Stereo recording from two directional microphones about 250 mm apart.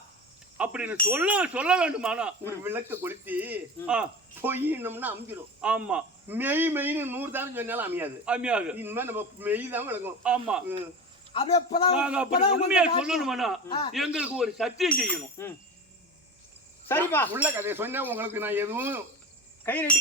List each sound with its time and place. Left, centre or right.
0.5 s a sound: centre
1.1 s speech: centre
11.3 s a man's voice: left
11.9 s speech: centre
16.9 s speech: centre
17.3 s speech: centre
19.6 s speech: centre